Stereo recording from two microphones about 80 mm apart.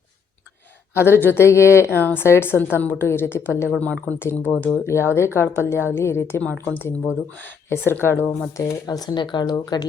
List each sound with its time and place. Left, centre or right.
0.9 s a woman's voice: left
3.8 s speech: centre
4.9 s speech: left
6.4 s a woman's voice: centre
8.5 s speech: left